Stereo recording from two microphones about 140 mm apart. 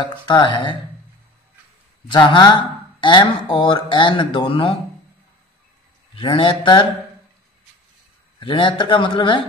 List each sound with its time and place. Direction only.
0.0 s speech: 35° left (ahead or behind)
2.0 s speech: 35° left (ahead or behind)
6.1 s speech: 40° left (ahead or behind)
8.4 s speech: 35° left (ahead or behind)